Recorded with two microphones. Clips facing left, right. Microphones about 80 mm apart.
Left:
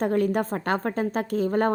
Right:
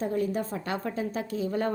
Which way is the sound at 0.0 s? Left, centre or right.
Left.